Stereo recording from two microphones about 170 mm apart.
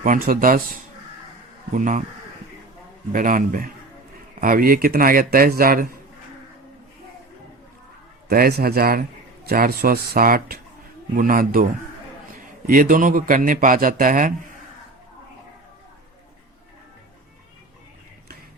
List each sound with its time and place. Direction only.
0.0 s speech: 55° right (ahead or behind)
1.7 s a man's voice: 50° right (ahead or behind)
3.1 s a man's voice: 50° right (ahead or behind)
8.3 s a man's voice: 60° right (ahead or behind)